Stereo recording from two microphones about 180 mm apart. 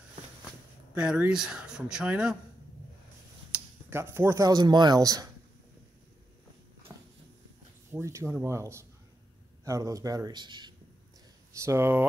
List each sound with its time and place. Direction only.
0.9 s speech: 5° right (ahead or behind)
3.5 s speech: 15° right (ahead or behind)
6.9 s a sound: 15° right (ahead or behind)
7.9 s speech: 15° right (ahead or behind)